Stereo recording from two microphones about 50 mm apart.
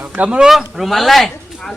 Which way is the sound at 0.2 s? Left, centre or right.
Right.